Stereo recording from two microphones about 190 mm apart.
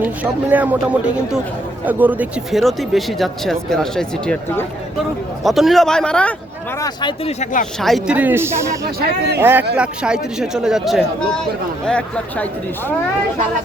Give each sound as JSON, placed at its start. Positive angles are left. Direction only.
{"t": 0.0, "sound": "speech", "side_deg": -10}
{"t": 6.7, "sound": "speech", "side_deg": 20}
{"t": 7.3, "sound": "speech", "side_deg": 35}
{"t": 7.8, "sound": "speech", "side_deg": 0}
{"t": 8.8, "sound": "speech", "side_deg": -55}
{"t": 9.4, "sound": "speech", "side_deg": -10}